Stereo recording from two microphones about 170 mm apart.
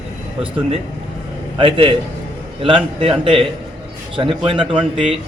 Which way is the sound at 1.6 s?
30° right (ahead or behind).